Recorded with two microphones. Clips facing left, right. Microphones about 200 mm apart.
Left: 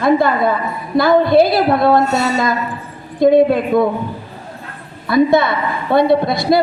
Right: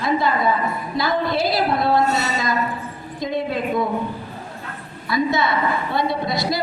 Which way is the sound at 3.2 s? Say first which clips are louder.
Left 13 dB; 55° left (ahead or behind).